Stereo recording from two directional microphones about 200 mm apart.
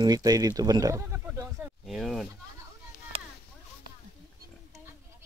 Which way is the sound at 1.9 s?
Centre (ahead or behind).